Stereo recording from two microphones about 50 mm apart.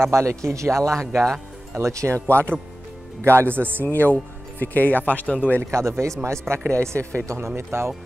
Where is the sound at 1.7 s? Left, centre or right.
Right.